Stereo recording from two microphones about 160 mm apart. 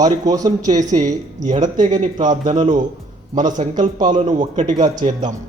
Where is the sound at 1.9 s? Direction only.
50° right (ahead or behind).